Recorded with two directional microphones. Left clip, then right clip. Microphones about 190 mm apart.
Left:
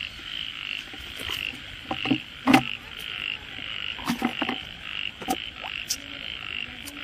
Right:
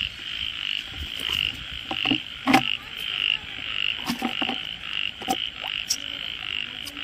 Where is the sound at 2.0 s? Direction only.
20° left (ahead or behind).